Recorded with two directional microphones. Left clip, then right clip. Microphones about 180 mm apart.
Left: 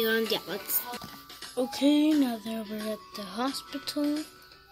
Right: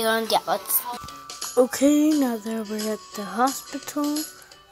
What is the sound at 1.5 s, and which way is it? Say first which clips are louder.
Music: right 7 dB; 25° right (ahead or behind).